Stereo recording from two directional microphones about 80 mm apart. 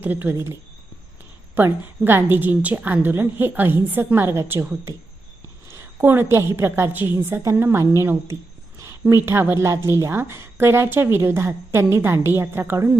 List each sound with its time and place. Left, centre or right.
0.0 s a woman's voice: right
1.5 s a woman's voice: right
5.6 s a woman's voice: right